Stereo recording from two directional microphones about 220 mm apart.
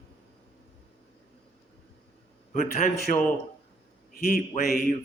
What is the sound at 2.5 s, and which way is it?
Speech, 40° left (ahead or behind).